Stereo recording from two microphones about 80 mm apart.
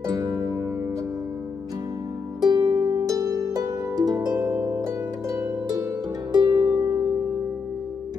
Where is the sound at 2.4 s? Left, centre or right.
Right.